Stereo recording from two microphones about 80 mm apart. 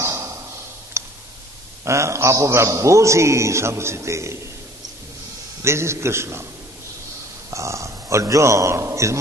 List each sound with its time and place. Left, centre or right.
0.0 s a sound: right
1.9 s a man's voice: right
5.6 s a man's voice: right
7.5 s a man's voice: right